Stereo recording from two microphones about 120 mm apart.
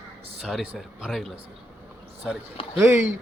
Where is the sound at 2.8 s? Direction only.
20° right (ahead or behind).